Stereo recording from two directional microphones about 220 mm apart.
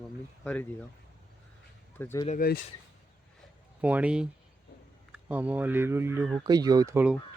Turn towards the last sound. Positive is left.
turn(degrees=-10)  # may be behind; listen again after turning